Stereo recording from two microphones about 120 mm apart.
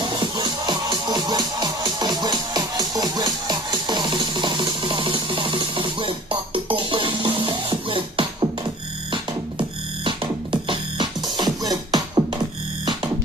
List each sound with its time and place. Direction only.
0.0 s music: 40° right (ahead or behind)
11.7 s beatboxing: 30° right (ahead or behind)